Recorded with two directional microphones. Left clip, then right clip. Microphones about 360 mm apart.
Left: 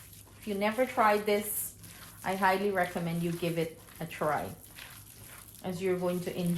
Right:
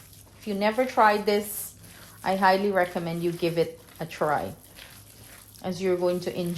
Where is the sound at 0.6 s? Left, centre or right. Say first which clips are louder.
Right 6 dB; right.